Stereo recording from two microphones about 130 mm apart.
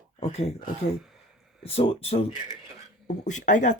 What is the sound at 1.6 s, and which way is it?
Speech, 50° left (ahead or behind).